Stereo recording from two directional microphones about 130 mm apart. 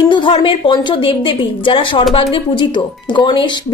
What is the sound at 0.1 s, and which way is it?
Speech, 40° left (ahead or behind).